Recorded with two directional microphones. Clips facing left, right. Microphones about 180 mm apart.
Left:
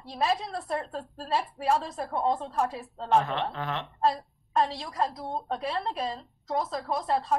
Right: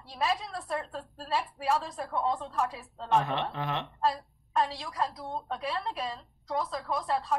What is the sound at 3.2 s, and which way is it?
Speech, 15° right (ahead or behind).